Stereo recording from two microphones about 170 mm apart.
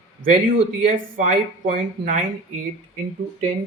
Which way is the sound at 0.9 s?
50° right (ahead or behind).